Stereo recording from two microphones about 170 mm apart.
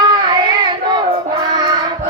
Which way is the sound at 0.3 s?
25° right (ahead or behind).